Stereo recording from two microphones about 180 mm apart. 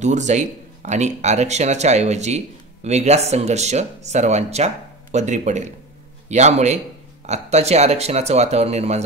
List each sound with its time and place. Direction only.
0.0 s speech: 40° right (ahead or behind)